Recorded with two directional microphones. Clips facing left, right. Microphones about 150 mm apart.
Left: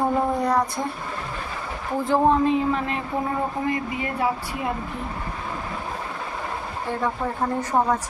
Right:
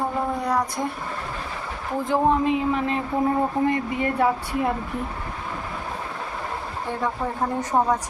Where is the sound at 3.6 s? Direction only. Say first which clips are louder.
Right 3 dB; 50° right (ahead or behind).